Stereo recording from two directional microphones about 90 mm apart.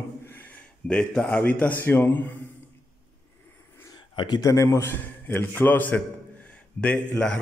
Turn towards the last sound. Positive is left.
turn(degrees=10)  # may be behind; listen again after turning